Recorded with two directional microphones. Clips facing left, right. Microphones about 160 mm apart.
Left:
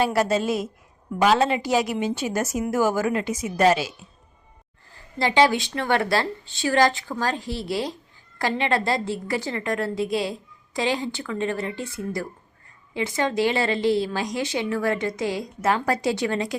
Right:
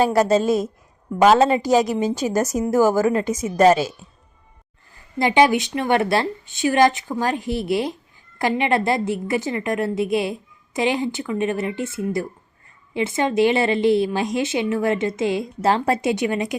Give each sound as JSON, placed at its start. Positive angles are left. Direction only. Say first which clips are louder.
{"t": 0.0, "sound": "a woman's voice", "louder": "right 5 dB", "side_deg": -40}
{"t": 5.2, "sound": "a woman's voice", "louder": "right 3 dB", "side_deg": -20}